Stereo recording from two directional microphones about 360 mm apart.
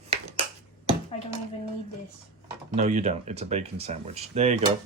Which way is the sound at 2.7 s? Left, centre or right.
Centre.